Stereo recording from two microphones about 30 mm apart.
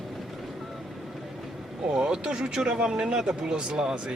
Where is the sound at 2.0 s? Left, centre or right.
Right.